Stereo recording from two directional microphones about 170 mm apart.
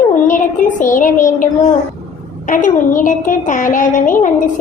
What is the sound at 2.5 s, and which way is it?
A woman's voice, 50° left (ahead or behind).